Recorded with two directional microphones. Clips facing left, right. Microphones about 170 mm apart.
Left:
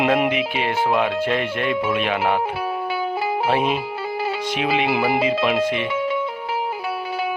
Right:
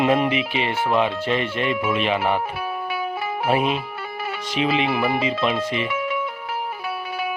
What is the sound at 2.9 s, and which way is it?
Music, 30° left (ahead or behind).